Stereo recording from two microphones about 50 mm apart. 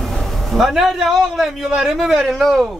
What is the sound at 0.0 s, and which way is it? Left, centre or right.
A man's voice, centre.